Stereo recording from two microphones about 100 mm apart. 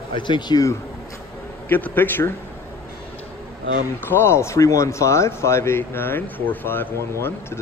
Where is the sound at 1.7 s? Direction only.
20° left (ahead or behind).